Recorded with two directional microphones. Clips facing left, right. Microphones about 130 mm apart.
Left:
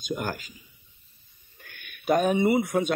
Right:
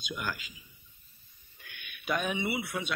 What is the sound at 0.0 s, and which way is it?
Speech, 45° left (ahead or behind).